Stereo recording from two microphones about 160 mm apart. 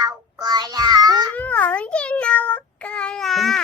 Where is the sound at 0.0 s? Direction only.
25° right (ahead or behind).